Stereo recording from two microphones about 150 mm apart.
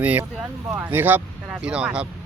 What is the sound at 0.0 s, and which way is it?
Speech, 10° right (ahead or behind).